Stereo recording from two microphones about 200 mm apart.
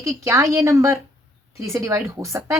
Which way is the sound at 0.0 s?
15° right (ahead or behind).